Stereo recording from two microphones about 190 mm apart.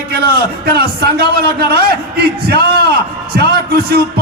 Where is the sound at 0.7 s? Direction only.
55° right (ahead or behind).